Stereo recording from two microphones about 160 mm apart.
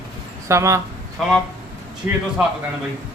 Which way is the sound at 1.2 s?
Centre (ahead or behind).